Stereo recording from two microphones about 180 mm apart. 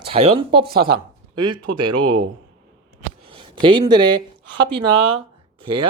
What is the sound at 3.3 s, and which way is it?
Speech, 30° right (ahead or behind).